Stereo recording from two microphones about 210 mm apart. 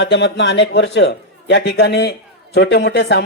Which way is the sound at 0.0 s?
55° left (ahead or behind).